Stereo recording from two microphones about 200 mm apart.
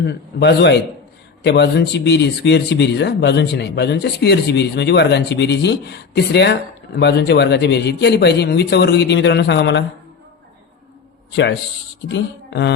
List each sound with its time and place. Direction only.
0.0 s speech: 55° left (ahead or behind)
12.0 s speech: 60° left (ahead or behind)